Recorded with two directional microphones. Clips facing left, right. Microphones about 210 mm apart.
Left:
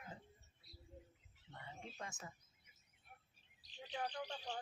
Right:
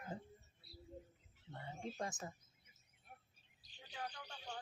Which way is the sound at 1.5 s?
40° right (ahead or behind).